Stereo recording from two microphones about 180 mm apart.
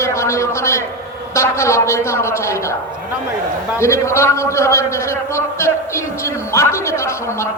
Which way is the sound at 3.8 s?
15° left (ahead or behind).